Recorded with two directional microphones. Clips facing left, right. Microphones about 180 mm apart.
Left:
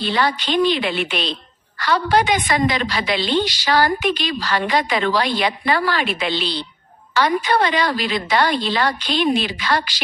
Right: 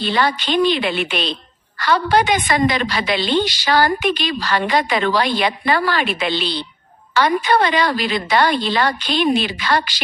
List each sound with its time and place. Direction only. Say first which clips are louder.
0.0 s a woman's voice: right 1 dB; 55° right (ahead or behind)